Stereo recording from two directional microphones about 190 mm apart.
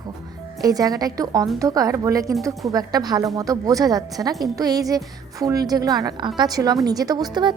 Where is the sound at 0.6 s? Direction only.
20° right (ahead or behind).